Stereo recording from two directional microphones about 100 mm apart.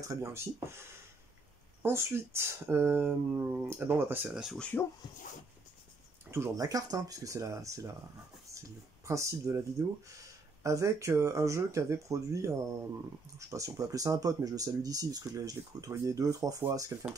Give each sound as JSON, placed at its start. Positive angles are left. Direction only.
{"t": 0.1, "sound": "speech", "side_deg": -30}
{"t": 4.6, "sound": "speech", "side_deg": 15}
{"t": 6.5, "sound": "speech", "side_deg": -35}